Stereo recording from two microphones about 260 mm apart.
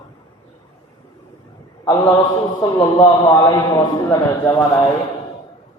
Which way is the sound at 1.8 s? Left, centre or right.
Centre.